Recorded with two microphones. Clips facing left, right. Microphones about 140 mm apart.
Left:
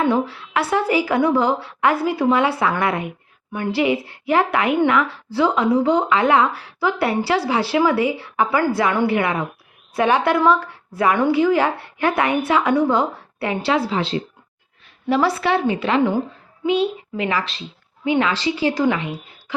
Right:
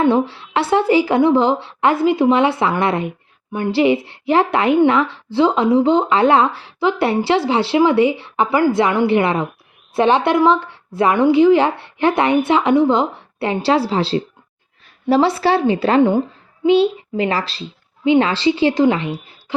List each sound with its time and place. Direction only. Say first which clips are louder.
0.0 s speech: right 4 dB; 30° right (ahead or behind)
15.2 s speech: right 3 dB; 30° right (ahead or behind)
16.0 s speech: right 5 dB; 25° right (ahead or behind)